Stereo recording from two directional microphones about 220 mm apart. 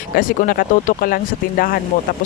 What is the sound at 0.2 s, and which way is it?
Speech, 40° left (ahead or behind).